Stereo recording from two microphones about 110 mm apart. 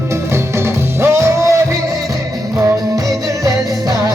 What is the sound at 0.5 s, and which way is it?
Music, 25° right (ahead or behind).